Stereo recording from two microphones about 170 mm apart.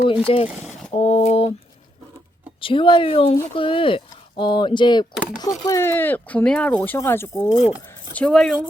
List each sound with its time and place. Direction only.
0.3 s speech: 35° left (ahead or behind)
0.9 s a sound: 45° left (ahead or behind)
2.6 s speech: 30° left (ahead or behind); by 7.5 s 15° left (ahead or behind)
7.5 s speech: 5° right (ahead or behind)